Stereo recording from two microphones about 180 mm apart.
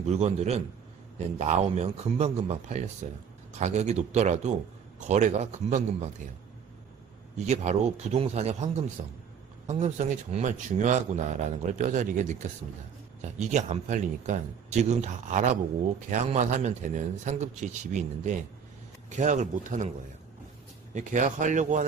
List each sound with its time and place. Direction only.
0.0 s speech: 35° right (ahead or behind)
7.3 s a man's voice: 40° right (ahead or behind)
13.5 s a man's voice: 40° right (ahead or behind)
20.9 s a man's voice: 45° right (ahead or behind)